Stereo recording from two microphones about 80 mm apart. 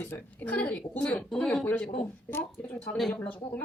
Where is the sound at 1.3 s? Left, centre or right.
Centre.